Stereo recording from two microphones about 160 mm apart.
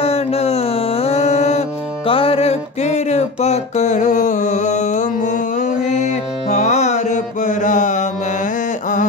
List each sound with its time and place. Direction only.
0.0 s music: 40° left (ahead or behind)